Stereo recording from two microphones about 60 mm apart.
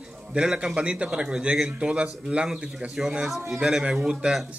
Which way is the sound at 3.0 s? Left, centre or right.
Centre.